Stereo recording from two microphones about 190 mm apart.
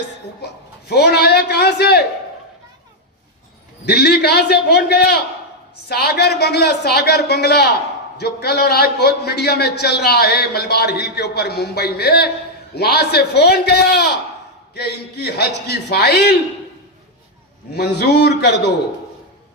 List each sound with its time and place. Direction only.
0.4 s a man's voice: 60° left (ahead or behind)
3.8 s a man's voice: 60° left (ahead or behind)
17.7 s a man's voice: 60° left (ahead or behind)